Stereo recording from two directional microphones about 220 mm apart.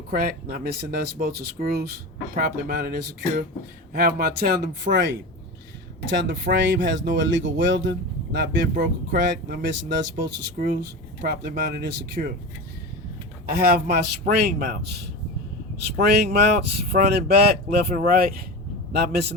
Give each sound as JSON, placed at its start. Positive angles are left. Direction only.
{"t": 0.1, "sound": "speech", "side_deg": -40}
{"t": 13.5, "sound": "speech", "side_deg": -45}